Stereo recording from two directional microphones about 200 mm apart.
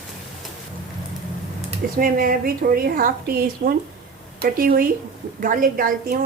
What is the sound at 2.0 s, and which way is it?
A woman's voice, 45° right (ahead or behind).